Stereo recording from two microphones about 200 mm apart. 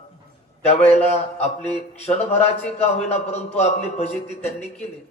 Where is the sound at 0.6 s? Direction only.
30° left (ahead or behind).